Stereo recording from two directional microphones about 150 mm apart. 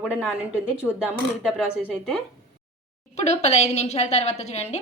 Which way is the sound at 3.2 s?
50° left (ahead or behind).